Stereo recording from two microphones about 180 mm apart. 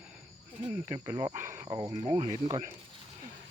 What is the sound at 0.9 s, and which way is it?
Speech, 25° right (ahead or behind).